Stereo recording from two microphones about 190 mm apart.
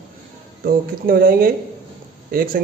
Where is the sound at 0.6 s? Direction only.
50° right (ahead or behind).